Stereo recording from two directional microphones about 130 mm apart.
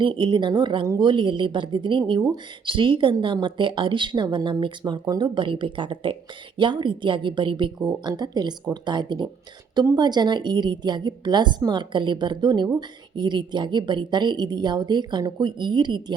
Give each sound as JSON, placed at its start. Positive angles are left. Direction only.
{"t": 0.0, "sound": "speech", "side_deg": -40}